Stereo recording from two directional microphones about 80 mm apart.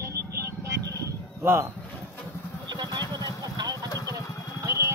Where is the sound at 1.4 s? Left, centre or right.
Right.